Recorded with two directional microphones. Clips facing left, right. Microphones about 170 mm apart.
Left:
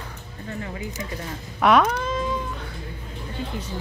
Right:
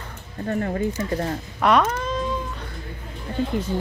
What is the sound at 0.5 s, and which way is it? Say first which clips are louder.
Speech: right 9 dB; 50° right (ahead or behind).